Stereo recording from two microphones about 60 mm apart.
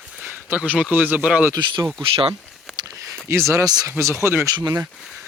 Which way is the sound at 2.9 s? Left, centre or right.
Right.